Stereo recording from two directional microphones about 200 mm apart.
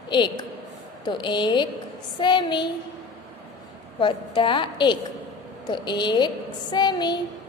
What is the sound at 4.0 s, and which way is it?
A woman's voice, 25° left (ahead or behind).